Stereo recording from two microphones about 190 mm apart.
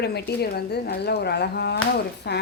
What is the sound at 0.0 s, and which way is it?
A woman's voice, 60° left (ahead or behind).